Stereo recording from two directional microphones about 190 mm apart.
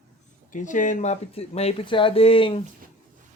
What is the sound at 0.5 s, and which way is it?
Speech, 40° left (ahead or behind).